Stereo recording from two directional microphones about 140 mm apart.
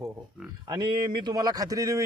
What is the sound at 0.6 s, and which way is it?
Speech, 30° right (ahead or behind).